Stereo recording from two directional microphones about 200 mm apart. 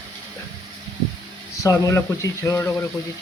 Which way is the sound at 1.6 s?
15° left (ahead or behind).